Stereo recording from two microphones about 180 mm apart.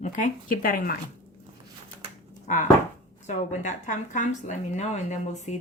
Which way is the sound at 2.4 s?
45° left (ahead or behind).